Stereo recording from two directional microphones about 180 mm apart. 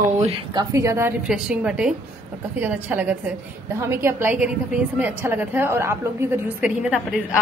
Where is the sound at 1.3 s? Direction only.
5° right (ahead or behind).